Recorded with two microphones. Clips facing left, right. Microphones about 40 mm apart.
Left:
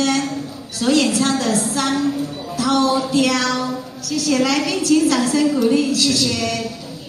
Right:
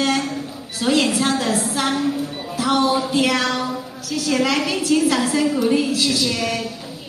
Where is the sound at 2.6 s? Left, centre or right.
Right.